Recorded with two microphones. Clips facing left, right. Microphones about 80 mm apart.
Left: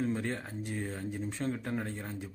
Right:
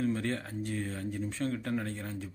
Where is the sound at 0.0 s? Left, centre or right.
Centre.